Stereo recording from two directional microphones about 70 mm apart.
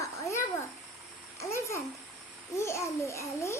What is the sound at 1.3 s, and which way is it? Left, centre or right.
Babbling, left.